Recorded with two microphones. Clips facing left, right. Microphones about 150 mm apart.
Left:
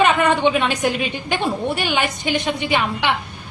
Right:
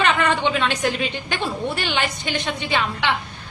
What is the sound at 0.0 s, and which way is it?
A woman's voice, 15° left (ahead or behind).